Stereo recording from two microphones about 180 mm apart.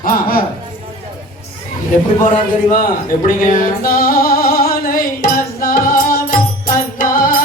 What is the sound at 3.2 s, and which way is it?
Music, 50° left (ahead or behind).